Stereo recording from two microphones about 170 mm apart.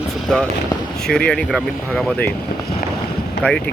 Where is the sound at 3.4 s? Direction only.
90° left.